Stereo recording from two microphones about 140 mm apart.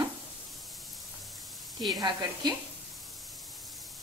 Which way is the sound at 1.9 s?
30° right (ahead or behind).